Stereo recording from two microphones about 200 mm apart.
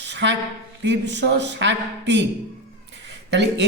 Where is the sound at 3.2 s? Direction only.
60° right (ahead or behind).